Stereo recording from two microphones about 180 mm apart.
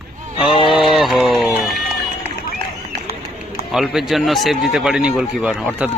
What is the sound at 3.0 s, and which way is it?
Run, 55° left (ahead or behind).